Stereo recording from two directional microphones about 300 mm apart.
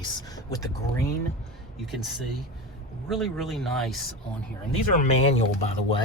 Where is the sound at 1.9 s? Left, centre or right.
Centre.